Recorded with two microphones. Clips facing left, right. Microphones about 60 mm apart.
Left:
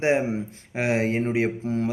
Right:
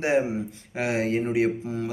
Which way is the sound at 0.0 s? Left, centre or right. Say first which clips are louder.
Left 1 dB; left.